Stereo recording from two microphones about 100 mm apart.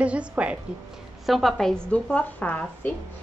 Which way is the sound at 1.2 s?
Centre (ahead or behind).